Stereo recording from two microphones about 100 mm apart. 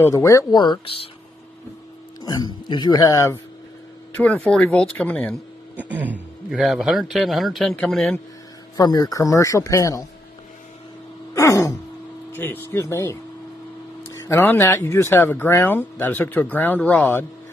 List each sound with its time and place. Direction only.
0.1 s speech: 30° left (ahead or behind)
0.5 s speech: 50° left (ahead or behind)
2.2 s speech: 40° left (ahead or behind)
4.2 s speech: 10° left (ahead or behind)
5.8 s a sound: 15° right (ahead or behind)
6.5 s a man's voice: 5° right (ahead or behind)
8.7 s speech: 35° left (ahead or behind)
11.3 s a sound: 35° left (ahead or behind)
12.3 s speech: 20° left (ahead or behind)
14.1 s a sound: 30° left (ahead or behind)
14.4 s speech: 20° left (ahead or behind)